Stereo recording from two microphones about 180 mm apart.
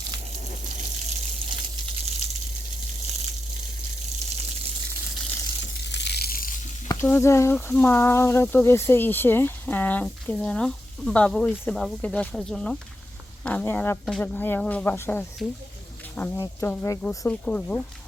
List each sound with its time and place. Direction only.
5.7 s a sound: 70° left (ahead or behind); by 6.5 s 55° left (ahead or behind)
6.8 s speech: 15° left (ahead or behind)
15.4 s speech: centre (ahead or behind)
16.1 s speech: 10° left (ahead or behind)